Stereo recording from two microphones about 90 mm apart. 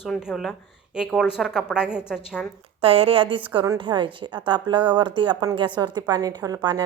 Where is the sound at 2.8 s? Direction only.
90° right.